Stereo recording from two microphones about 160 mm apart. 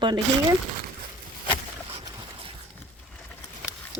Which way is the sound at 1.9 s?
35° right (ahead or behind).